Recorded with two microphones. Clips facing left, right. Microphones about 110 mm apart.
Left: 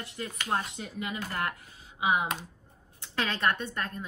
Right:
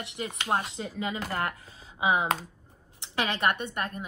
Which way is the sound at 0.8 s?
30° right (ahead or behind).